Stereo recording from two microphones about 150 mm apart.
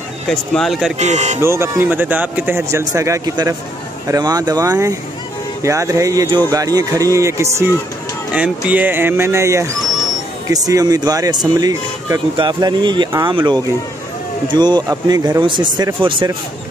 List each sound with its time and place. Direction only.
0.3 s speech: centre (ahead or behind)
0.9 s speech: 50° right (ahead or behind)
1.4 s a man's voice: 15° right (ahead or behind)
8.3 s a man's voice: 10° right (ahead or behind); by 16.3 s 35° right (ahead or behind)